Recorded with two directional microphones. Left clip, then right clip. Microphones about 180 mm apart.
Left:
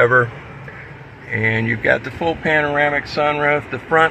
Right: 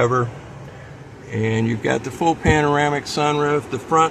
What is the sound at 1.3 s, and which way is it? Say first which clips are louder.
Speech: left 4 dB; 15° right (ahead or behind).